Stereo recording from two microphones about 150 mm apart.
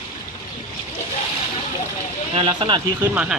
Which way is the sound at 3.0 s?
10° right (ahead or behind).